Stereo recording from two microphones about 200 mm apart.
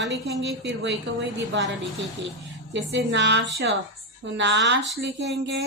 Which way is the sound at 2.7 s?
65° right (ahead or behind).